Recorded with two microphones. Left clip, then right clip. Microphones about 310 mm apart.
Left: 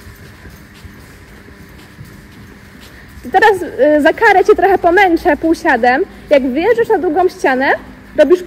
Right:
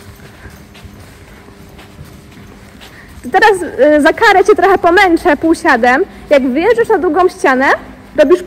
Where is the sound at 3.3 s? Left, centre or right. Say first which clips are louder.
Right 1 dB; right.